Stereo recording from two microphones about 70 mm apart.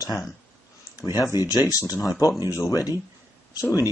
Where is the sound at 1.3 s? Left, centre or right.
Right.